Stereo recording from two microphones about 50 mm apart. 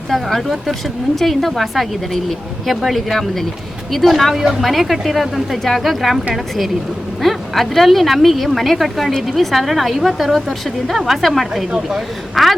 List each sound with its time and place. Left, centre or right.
0.1 s speech: centre
7.2 s speech: centre
11.7 s speech: centre
12.3 s speech: centre